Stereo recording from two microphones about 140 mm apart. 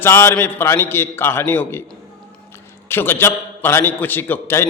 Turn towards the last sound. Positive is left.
turn(degrees=15)  # may be behind; listen again after turning